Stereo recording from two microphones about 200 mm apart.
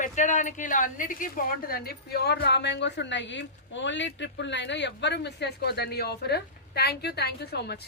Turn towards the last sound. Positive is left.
turn(degrees=55)  # may be behind; listen again after turning